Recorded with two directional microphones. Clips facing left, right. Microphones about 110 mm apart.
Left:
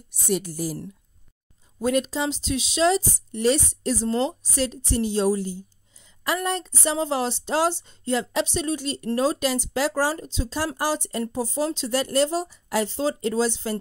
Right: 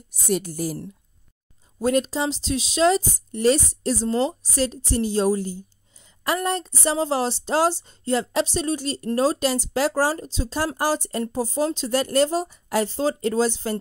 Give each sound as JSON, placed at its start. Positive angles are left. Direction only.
{"t": 0.3, "sound": "speech", "side_deg": -50}
{"t": 1.8, "sound": "a woman's voice", "side_deg": -35}
{"t": 4.1, "sound": "a woman's voice", "side_deg": -10}
{"t": 4.4, "sound": "a woman's voice", "side_deg": -40}